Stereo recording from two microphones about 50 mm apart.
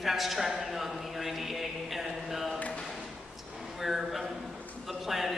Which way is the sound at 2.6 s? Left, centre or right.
Left.